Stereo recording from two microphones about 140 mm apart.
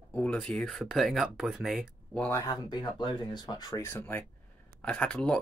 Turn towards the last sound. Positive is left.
turn(degrees=5)  # may be behind; listen again after turning